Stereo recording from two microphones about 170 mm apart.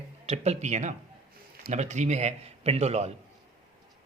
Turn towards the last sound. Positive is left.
turn(degrees=-40)  # may be behind; listen again after turning